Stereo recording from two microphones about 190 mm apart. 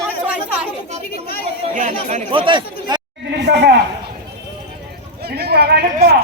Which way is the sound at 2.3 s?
25° right (ahead or behind).